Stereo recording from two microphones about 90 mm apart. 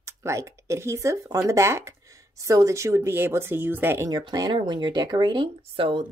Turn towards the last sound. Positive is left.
turn(degrees=-65)  # may be behind; listen again after turning